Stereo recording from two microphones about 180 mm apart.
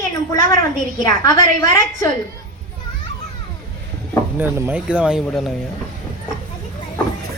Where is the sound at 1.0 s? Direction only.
20° left (ahead or behind).